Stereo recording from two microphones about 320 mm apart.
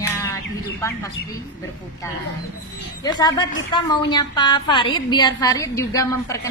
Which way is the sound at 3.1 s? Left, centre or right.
Centre.